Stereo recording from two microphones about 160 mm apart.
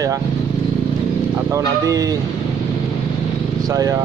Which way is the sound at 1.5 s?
20° right (ahead or behind).